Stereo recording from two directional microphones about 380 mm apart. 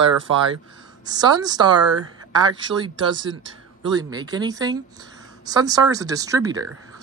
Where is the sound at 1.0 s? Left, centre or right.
Centre.